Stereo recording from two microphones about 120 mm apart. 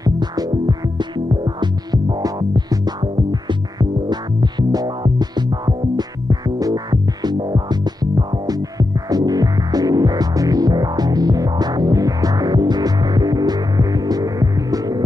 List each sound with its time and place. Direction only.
0.0 s music: 35° right (ahead or behind)